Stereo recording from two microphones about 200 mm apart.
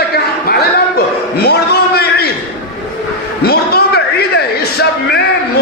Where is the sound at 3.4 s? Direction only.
50° left (ahead or behind).